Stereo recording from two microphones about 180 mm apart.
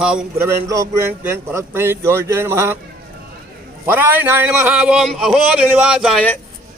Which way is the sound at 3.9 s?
10° right (ahead or behind).